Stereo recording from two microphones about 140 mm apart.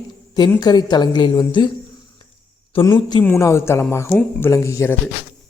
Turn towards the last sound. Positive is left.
turn(degrees=20)  # may be behind; listen again after turning